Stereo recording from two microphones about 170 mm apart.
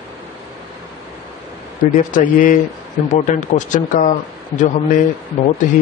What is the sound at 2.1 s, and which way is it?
Speech, 50° left (ahead or behind).